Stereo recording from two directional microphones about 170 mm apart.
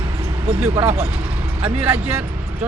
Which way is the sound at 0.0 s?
30° right (ahead or behind).